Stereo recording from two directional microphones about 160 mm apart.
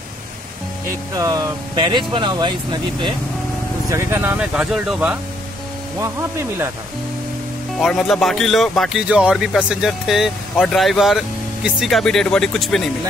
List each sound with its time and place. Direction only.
1.1 s speech: 20° right (ahead or behind)
3.9 s speech: 15° right (ahead or behind)
5.9 s speech: 20° right (ahead or behind)
7.8 s a man's voice: centre (ahead or behind)